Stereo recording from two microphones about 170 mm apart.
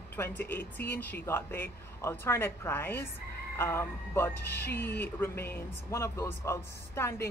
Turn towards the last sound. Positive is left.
turn(degrees=15)  # may be behind; listen again after turning